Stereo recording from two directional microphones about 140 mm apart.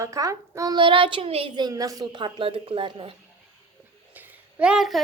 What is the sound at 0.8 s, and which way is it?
Speech, 35° right (ahead or behind).